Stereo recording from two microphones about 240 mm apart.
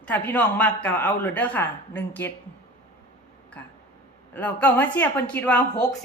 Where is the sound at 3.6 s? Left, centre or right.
Centre.